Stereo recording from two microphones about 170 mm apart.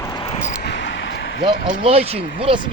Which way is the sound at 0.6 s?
80° left.